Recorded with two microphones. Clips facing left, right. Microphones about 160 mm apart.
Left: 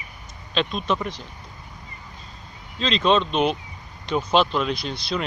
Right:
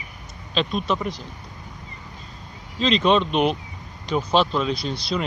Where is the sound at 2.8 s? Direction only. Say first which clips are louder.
Right 1 dB; 10° right (ahead or behind).